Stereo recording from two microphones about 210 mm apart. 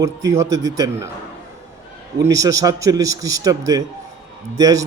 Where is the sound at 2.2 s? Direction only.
15° right (ahead or behind).